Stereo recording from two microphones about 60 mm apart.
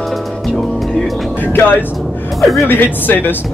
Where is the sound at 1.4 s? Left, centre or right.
Left.